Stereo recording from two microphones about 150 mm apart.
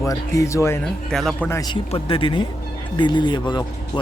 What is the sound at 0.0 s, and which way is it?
Speech, 20° left (ahead or behind).